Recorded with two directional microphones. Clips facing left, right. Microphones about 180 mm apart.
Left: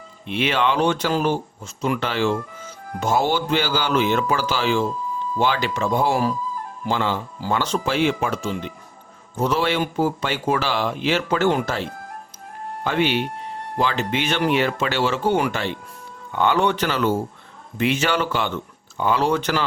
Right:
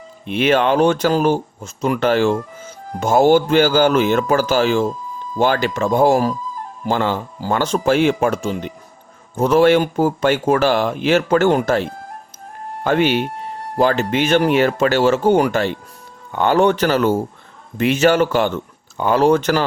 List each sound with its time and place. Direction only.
0.3 s speech: 45° right (ahead or behind)